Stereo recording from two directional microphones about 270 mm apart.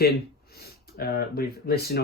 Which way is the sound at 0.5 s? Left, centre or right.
Left.